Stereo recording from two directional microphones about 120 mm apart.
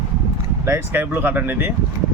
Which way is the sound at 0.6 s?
20° right (ahead or behind).